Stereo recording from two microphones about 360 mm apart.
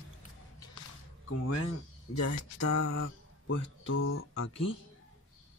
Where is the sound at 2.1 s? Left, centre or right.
Left.